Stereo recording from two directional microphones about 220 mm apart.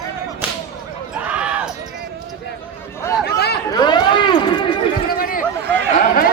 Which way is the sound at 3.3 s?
45° left (ahead or behind).